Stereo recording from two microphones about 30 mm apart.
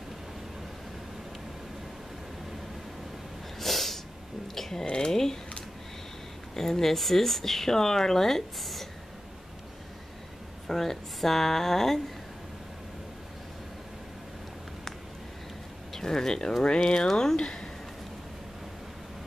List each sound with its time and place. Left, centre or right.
3.5 s snort: centre
4.6 s a sound: centre
4.8 s a sound: left
6.5 s speech: centre
10.7 s speech: centre
15.9 s speech: centre
16.8 s speech: left
17.1 s speech: centre
17.4 s speech: left